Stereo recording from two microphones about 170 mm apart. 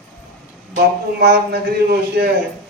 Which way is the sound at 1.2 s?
70° right (ahead or behind).